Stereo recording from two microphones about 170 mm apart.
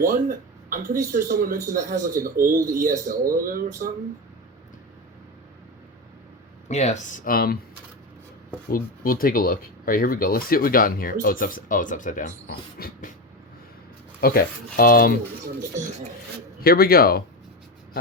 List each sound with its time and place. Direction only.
0.0 s speech: 55° right (ahead or behind)
2.6 s speech: 20° right (ahead or behind)
2.8 s speech: 55° right (ahead or behind)
6.7 s speech: 40° left (ahead or behind); by 7.6 s 60° left (ahead or behind)
8.7 s speech: 60° left (ahead or behind)
14.2 s speech: 60° left (ahead or behind)
16.6 s speech: 60° left (ahead or behind)